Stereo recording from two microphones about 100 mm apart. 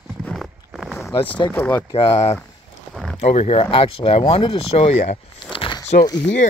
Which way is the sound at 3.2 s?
90° left.